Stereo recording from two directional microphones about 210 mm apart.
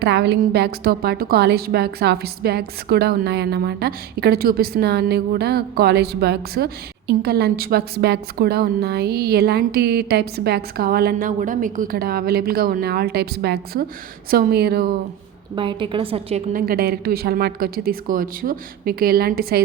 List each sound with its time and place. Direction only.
0.0 s a woman's voice: 50° right (ahead or behind)
15.5 s a woman's voice: 25° right (ahead or behind)
16.5 s a woman's voice: 40° right (ahead or behind)